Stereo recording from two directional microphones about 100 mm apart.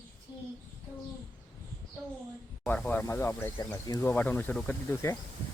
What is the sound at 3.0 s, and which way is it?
Speech, 25° left (ahead or behind).